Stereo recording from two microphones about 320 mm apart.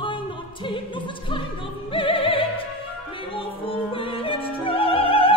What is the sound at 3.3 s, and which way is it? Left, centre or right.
Music, centre.